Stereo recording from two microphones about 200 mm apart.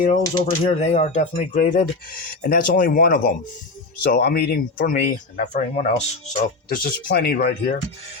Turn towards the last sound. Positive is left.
turn(degrees=45)  # may be behind; listen again after turning